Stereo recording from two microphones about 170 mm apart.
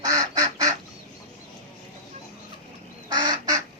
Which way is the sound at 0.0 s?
20° right (ahead or behind).